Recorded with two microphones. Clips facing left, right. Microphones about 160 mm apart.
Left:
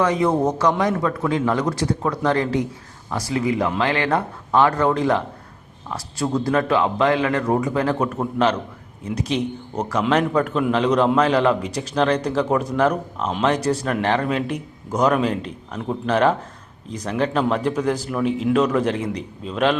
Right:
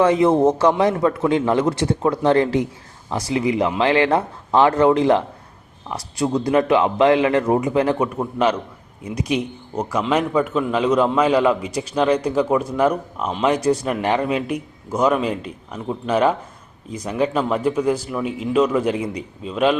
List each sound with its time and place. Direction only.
0.0 s a man's voice: 25° right (ahead or behind)
7.9 s a man's voice: 10° right (ahead or behind)